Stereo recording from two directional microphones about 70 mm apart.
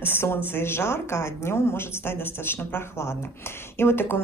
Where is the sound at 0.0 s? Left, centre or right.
Left.